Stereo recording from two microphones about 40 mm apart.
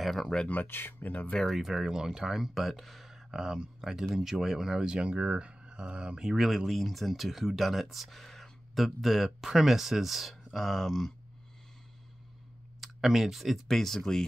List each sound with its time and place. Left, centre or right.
0.0 s speech: centre
0.7 s speech: left
1.6 s speech: centre
4.8 s speech: right
6.3 s speech: centre
12.8 s speech: centre